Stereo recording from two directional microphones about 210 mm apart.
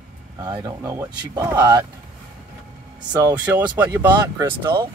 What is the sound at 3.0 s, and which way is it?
Speech, 15° right (ahead or behind).